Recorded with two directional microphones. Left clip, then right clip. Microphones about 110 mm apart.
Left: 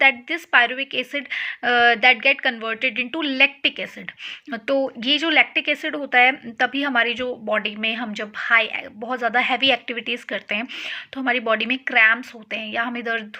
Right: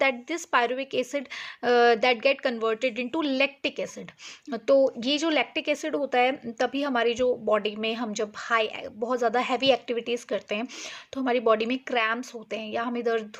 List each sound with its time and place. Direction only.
0.0 s a woman's voice: 55° right (ahead or behind)